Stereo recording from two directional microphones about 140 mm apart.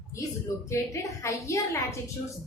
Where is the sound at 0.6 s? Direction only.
20° left (ahead or behind).